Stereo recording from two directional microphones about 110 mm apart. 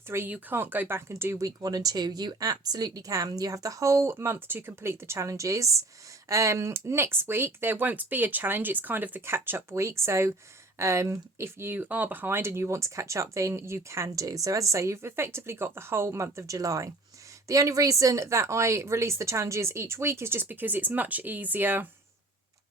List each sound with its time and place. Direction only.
0.1 s speech: 20° right (ahead or behind)